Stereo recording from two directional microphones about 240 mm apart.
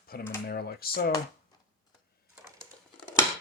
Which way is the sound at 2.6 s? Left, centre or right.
Centre.